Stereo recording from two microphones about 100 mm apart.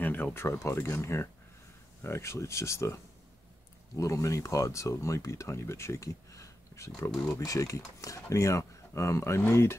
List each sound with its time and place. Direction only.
0.0 s speech: 20° left (ahead or behind)